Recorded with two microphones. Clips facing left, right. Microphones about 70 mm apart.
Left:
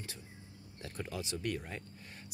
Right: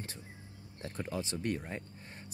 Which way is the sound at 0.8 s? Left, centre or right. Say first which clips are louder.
Right 3 dB; right.